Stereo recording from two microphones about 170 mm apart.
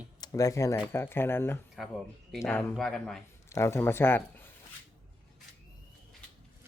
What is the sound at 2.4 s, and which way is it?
Speech, 15° left (ahead or behind).